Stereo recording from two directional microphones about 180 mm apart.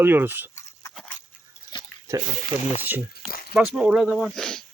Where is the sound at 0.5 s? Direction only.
20° left (ahead or behind).